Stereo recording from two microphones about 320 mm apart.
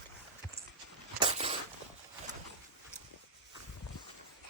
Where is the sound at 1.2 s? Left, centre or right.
Centre.